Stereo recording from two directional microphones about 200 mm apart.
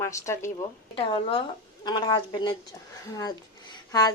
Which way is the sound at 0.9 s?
25° left (ahead or behind).